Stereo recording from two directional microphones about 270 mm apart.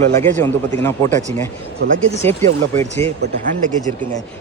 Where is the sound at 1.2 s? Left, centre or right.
Right.